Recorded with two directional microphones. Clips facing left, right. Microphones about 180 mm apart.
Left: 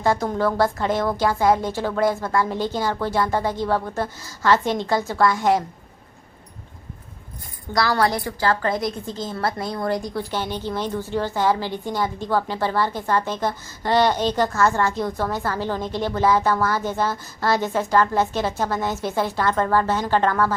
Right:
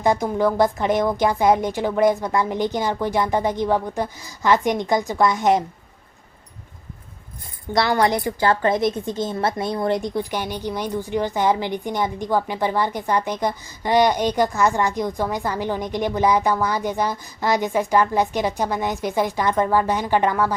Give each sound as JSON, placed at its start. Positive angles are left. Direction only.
{"t": 0.0, "sound": "a woman's voice", "side_deg": -15}
{"t": 7.7, "sound": "a woman's voice", "side_deg": -20}